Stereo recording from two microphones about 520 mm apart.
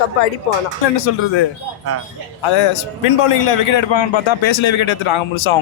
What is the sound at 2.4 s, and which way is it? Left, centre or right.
A man's voice, left.